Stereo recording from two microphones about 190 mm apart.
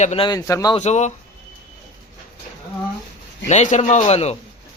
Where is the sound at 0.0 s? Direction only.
35° left (ahead or behind).